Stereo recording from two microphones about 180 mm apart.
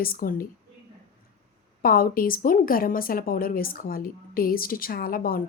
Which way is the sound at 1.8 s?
55° left (ahead or behind).